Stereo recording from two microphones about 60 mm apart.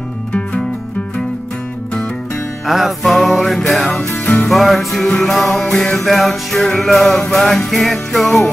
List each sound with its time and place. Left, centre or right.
0.3 s music: centre
2.6 s music: centre